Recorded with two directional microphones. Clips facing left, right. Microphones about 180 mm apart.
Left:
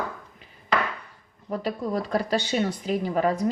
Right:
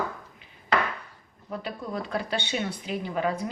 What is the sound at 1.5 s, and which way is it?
Speech, 40° left (ahead or behind).